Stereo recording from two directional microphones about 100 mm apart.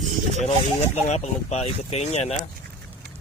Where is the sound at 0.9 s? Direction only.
90° left.